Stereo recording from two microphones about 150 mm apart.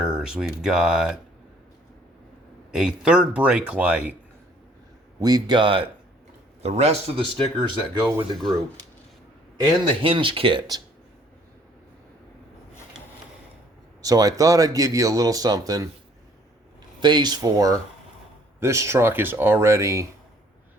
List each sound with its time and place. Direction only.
0.0 s speech: 5° right (ahead or behind)
2.7 s speech: 5° right (ahead or behind)
5.2 s speech: 25° right (ahead or behind)
6.6 s speech: 45° right (ahead or behind)
9.6 s speech: 35° right (ahead or behind)
14.0 s speech: 25° right (ahead or behind)
17.0 s speech: 30° right (ahead or behind)